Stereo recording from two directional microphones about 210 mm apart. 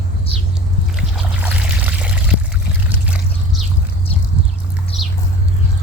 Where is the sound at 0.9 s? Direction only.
5° right (ahead or behind).